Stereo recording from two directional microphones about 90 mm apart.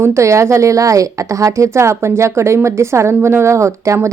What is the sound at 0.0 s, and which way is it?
A woman's voice, 30° right (ahead or behind).